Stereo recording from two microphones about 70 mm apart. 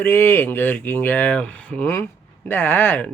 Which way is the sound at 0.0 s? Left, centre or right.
Left.